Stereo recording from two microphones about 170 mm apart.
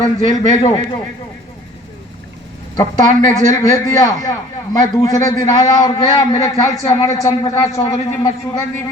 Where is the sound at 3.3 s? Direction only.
20° left (ahead or behind).